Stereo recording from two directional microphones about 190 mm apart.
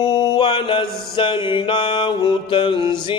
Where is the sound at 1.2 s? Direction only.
25° left (ahead or behind).